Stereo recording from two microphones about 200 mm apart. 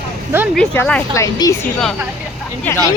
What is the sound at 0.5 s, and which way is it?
Speech, 5° left (ahead or behind).